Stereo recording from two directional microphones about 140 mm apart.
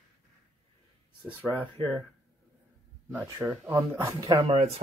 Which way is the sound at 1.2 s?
10° right (ahead or behind).